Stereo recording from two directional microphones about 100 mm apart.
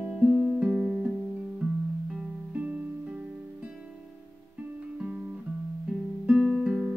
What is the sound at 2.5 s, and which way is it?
Music, 15° right (ahead or behind).